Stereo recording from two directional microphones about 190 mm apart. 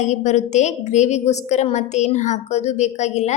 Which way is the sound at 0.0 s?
40° left (ahead or behind).